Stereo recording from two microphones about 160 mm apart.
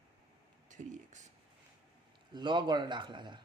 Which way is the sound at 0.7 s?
50° right (ahead or behind).